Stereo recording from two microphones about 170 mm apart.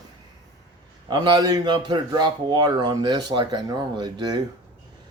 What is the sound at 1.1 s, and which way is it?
Speech, 25° right (ahead or behind).